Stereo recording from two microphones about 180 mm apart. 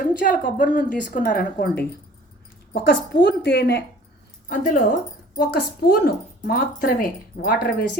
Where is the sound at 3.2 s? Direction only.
70° left (ahead or behind).